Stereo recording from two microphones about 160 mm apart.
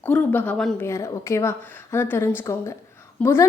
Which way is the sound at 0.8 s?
20° left (ahead or behind).